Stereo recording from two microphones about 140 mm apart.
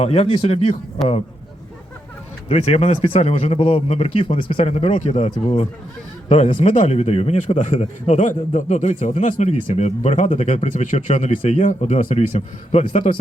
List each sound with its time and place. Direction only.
0.0 s speech: 45° left (ahead or behind)
2.5 s speech: 45° left (ahead or behind)